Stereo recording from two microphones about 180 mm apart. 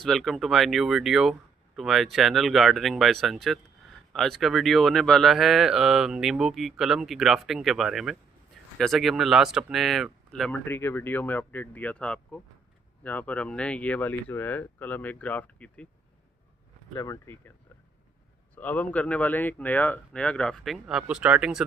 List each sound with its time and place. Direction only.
0.0 s speech: centre (ahead or behind)
16.9 s speech: 20° left (ahead or behind)
18.5 s speech: 10° left (ahead or behind)